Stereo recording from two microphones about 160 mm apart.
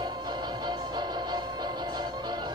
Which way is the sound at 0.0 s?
30° right (ahead or behind).